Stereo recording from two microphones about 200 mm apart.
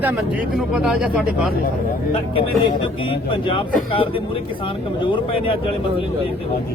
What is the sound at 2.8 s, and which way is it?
Speech, 25° left (ahead or behind).